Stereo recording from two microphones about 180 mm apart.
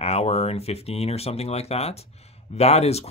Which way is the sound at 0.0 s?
35° left (ahead or behind).